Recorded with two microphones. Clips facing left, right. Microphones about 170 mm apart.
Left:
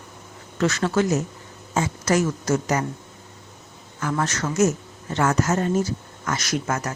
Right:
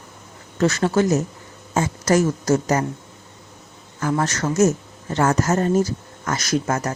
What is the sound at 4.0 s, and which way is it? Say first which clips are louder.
A woman's voice: right 3 dB; 40° right (ahead or behind).